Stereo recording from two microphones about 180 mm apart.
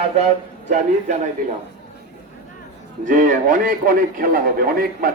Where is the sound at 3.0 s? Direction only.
45° right (ahead or behind).